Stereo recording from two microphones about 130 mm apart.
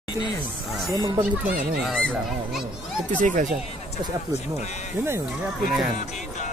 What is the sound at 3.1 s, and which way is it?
Speech, 80° right.